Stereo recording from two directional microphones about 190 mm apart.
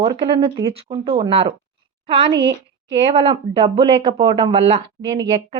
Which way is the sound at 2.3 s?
65° right (ahead or behind).